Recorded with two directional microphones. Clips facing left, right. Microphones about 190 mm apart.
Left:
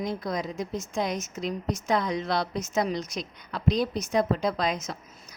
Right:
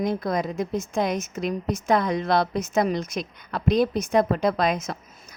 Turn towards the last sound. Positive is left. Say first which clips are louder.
# right 5 dB
turn(degrees=-55)  # may be behind; listen again after turning